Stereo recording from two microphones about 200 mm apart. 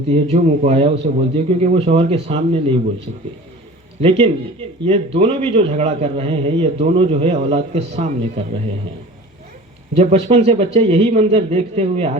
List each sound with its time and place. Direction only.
0.1 s a man's voice: 35° right (ahead or behind)
4.0 s a man's voice: 30° right (ahead or behind)
9.9 s a man's voice: 30° right (ahead or behind)